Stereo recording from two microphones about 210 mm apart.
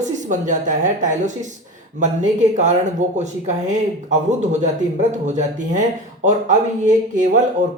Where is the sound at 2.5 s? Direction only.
35° right (ahead or behind).